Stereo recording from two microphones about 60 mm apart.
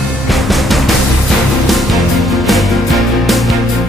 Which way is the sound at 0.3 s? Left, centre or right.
Centre.